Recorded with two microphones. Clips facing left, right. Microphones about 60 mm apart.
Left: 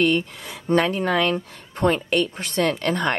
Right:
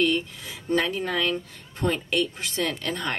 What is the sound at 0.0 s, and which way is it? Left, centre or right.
Speech, left.